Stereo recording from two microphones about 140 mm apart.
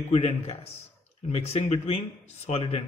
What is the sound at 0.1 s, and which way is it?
A man's voice, 45° left (ahead or behind).